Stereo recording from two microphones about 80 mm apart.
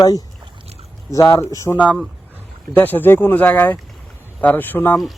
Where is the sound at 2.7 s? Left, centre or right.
Left.